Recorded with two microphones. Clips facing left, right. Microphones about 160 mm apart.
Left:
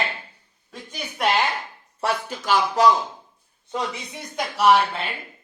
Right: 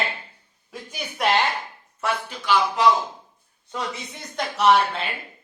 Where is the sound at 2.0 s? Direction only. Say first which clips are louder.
Left 2 dB; 45° left (ahead or behind).